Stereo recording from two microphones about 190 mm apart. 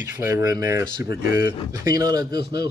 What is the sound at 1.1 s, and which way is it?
Speech, 60° left (ahead or behind).